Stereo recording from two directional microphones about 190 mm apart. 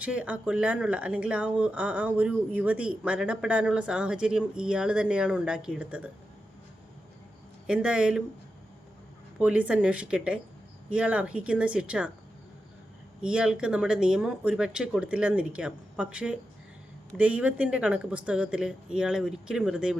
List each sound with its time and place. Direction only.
0.0 s speech: 5° right (ahead or behind)
7.7 s speech: 5° right (ahead or behind)
9.4 s speech: 5° right (ahead or behind)
13.2 s speech: 5° right (ahead or behind)